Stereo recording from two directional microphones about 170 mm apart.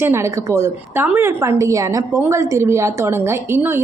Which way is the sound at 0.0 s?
15° right (ahead or behind).